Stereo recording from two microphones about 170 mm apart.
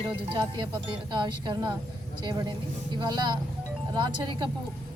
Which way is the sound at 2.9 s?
25° right (ahead or behind).